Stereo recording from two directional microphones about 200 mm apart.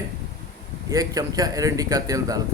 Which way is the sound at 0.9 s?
15° right (ahead or behind).